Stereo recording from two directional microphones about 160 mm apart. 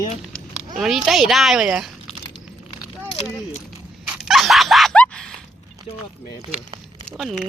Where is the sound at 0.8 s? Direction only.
Centre (ahead or behind).